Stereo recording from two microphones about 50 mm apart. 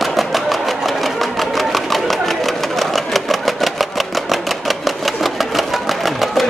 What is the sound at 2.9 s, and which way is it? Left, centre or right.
Engine, centre.